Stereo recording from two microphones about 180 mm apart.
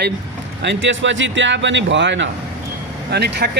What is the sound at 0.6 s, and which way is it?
A man's voice, 85° right.